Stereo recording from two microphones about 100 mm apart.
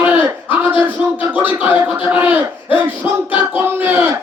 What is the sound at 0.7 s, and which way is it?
Speech, 15° right (ahead or behind).